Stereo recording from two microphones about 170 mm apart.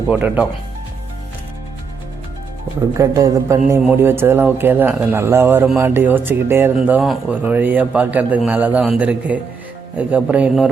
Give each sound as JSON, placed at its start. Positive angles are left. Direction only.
{"t": 0.1, "sound": "speech", "side_deg": -10}
{"t": 3.0, "sound": "a man's voice", "side_deg": -20}